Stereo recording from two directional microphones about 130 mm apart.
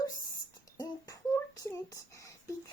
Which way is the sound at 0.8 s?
25° left (ahead or behind).